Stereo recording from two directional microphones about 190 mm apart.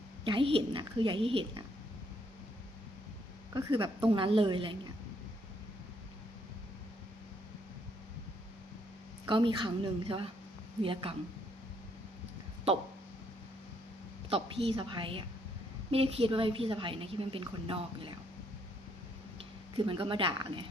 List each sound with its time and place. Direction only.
0.3 s a woman's voice: 25° right (ahead or behind)
3.5 s a woman's voice: 25° right (ahead or behind)
9.2 s a woman's voice: 25° right (ahead or behind)
14.3 s a woman's voice: 30° right (ahead or behind)
19.7 s a woman's voice: 25° right (ahead or behind)